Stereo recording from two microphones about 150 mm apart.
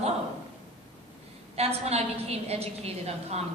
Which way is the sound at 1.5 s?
45° right (ahead or behind).